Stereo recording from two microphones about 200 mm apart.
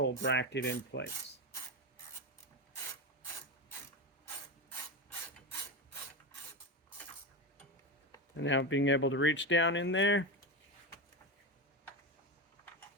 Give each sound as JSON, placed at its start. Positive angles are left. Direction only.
{"t": 0.0, "sound": "mechanisms", "side_deg": 60}
{"t": 8.4, "sound": "speech", "side_deg": 70}